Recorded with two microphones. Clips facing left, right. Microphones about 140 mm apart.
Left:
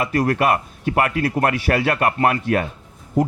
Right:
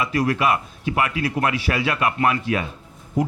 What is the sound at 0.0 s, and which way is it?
A man's voice, 50° left (ahead or behind).